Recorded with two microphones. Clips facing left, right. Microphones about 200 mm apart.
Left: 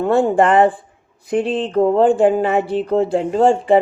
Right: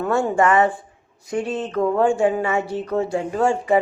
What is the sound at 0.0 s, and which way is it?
Speech, 30° left (ahead or behind).